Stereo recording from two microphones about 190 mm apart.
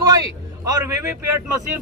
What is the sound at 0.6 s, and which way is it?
A man's voice, 15° right (ahead or behind).